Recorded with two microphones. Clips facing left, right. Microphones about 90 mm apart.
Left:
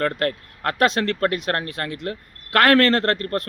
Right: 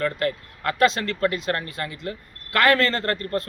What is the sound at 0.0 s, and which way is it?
A man's voice, 55° left (ahead or behind).